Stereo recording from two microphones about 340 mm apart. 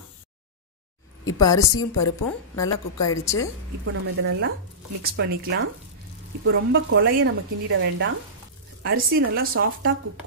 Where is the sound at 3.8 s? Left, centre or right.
Right.